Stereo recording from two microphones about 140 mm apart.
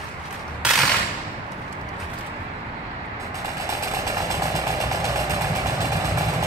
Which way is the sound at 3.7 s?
20° right (ahead or behind).